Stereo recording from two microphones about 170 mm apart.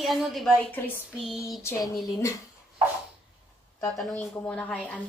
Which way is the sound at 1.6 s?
15° left (ahead or behind).